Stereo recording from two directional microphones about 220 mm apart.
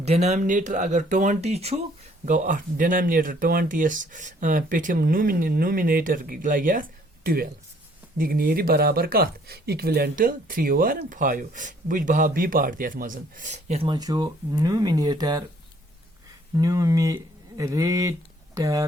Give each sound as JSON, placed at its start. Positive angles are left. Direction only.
{"t": 0.0, "sound": "speech", "side_deg": -30}
{"t": 8.2, "sound": "speech", "side_deg": -40}
{"t": 16.6, "sound": "speech", "side_deg": -15}